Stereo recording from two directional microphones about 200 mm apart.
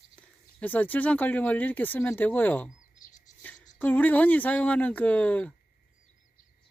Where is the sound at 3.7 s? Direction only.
10° left (ahead or behind).